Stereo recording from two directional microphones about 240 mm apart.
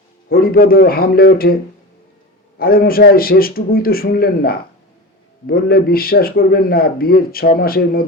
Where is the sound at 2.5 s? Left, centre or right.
Left.